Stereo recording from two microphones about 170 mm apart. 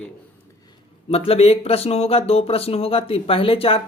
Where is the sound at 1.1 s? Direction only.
35° left (ahead or behind).